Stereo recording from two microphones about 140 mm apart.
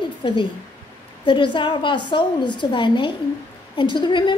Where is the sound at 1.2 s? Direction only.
35° left (ahead or behind).